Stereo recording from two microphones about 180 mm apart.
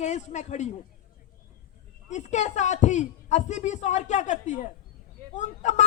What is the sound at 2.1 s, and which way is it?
Speech, 40° left (ahead or behind).